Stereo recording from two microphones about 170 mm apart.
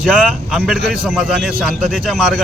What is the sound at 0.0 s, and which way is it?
Speech, centre (ahead or behind).